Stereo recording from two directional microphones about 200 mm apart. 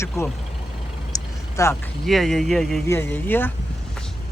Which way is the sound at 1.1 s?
15° left (ahead or behind).